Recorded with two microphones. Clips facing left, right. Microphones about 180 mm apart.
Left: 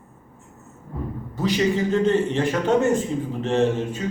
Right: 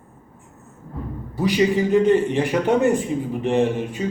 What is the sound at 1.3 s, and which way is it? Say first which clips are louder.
A man's voice: right 3 dB; 15° right (ahead or behind).